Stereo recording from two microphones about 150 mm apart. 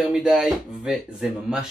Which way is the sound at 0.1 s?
5° right (ahead or behind).